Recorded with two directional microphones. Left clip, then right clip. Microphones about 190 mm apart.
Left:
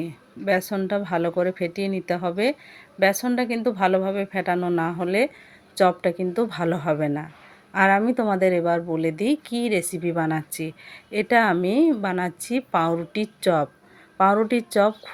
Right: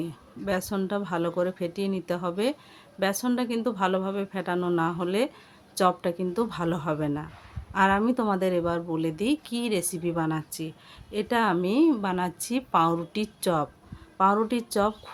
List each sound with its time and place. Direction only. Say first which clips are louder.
0.0 s speech: left 5 dB; 10° left (ahead or behind)